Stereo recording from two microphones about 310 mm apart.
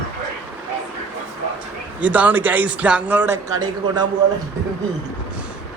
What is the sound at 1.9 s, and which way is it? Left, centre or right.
A man's voice, centre.